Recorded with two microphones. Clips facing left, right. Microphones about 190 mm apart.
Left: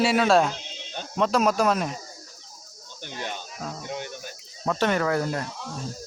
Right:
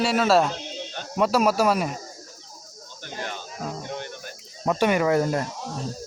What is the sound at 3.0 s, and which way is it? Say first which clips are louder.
Speech: even; 20° left (ahead or behind).